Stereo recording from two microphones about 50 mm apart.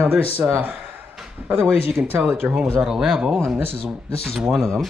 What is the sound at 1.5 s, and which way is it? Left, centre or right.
Speech, right.